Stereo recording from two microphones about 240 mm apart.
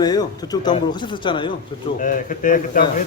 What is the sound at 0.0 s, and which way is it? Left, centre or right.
A man's voice, centre.